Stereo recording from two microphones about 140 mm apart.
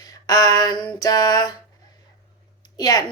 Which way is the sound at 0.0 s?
25° left (ahead or behind).